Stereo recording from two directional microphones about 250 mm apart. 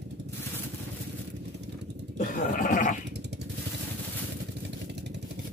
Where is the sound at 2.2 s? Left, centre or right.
Left.